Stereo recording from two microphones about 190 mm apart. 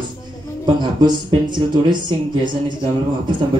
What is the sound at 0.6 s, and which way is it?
A man's voice, 25° right (ahead or behind).